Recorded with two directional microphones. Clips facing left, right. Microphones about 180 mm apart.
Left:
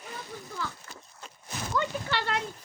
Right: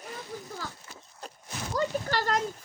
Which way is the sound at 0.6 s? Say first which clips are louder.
Left 3 dB; 40° right (ahead or behind).